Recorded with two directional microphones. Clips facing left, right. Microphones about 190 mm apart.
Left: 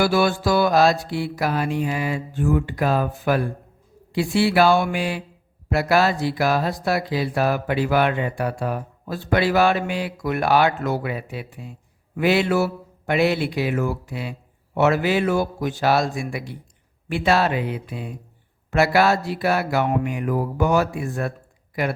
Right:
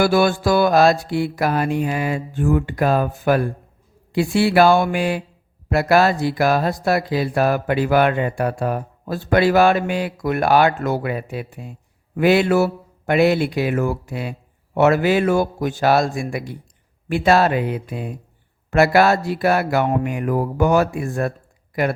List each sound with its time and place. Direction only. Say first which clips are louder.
0.0 s speech: right 3 dB; 50° right (ahead or behind)